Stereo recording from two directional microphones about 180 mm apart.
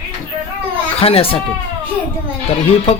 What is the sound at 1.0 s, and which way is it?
Speech, 30° left (ahead or behind).